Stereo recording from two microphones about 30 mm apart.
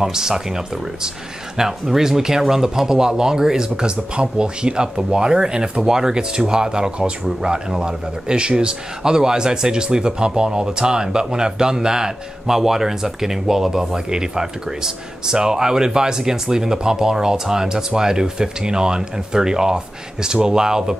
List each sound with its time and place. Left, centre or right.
0.0 s speech: centre
1.6 s speech: centre